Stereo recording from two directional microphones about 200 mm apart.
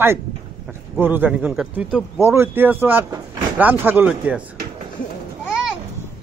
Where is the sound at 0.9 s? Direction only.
10° right (ahead or behind).